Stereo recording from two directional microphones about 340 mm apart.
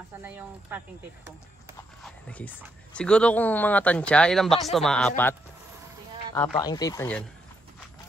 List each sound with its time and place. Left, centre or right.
0.2 s speech: centre
2.0 s a sound: centre
2.6 s speech: centre
6.3 s speech: centre